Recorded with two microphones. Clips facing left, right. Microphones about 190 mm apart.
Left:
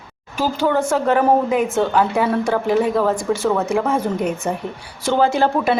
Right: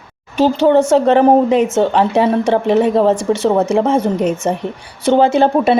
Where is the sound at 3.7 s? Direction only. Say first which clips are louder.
Right 5 dB; 25° right (ahead or behind).